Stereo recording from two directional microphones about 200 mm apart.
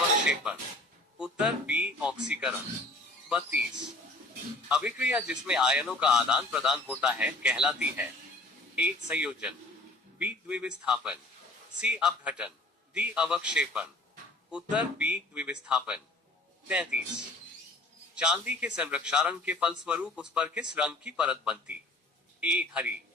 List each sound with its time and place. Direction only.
1.2 s a man's voice: 5° right (ahead or behind)
4.7 s a man's voice: 5° right (ahead or behind)
18.1 s a man's voice: 5° right (ahead or behind)